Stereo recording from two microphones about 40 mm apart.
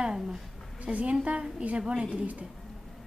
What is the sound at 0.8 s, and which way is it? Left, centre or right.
Speech, right.